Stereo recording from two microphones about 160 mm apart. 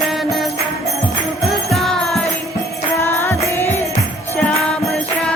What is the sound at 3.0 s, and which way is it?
Music, 15° left (ahead or behind).